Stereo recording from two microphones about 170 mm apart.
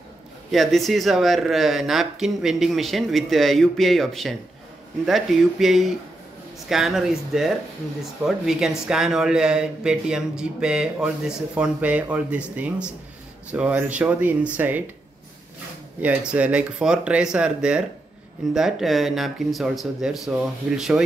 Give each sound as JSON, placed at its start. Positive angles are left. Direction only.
{"t": 0.5, "sound": "speech", "side_deg": 0}
{"t": 16.0, "sound": "speech", "side_deg": -10}